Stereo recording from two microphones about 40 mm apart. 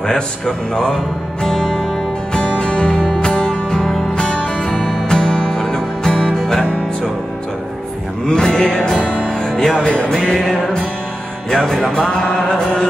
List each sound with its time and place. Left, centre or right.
1.4 s music: centre
2.3 s music: left
8.3 s music: centre
9.4 s speech: centre
10.2 s music: left